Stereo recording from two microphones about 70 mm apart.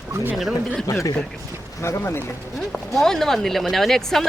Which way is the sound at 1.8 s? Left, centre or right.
Left.